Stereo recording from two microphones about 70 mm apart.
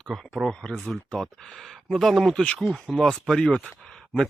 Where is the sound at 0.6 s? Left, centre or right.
Centre.